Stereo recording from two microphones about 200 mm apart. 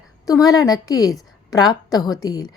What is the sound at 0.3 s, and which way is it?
A woman's voice, 20° left (ahead or behind).